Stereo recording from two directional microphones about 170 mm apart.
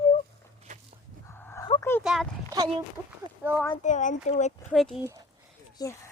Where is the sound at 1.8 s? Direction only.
15° left (ahead or behind).